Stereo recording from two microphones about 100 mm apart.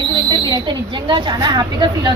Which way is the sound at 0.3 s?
45° right (ahead or behind).